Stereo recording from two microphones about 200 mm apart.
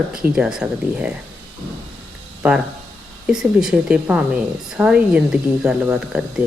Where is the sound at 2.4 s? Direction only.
5° right (ahead or behind).